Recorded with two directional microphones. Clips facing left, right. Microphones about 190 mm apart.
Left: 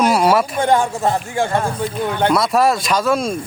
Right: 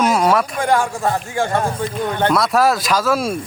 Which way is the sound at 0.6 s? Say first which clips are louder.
Left 2 dB; 20° left (ahead or behind).